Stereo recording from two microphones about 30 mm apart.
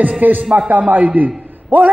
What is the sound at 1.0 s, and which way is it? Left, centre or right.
Speech, right.